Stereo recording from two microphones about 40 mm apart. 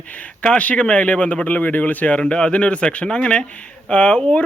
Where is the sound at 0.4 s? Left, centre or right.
Left.